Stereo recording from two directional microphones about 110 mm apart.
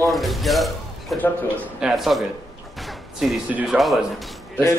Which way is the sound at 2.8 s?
Centre (ahead or behind).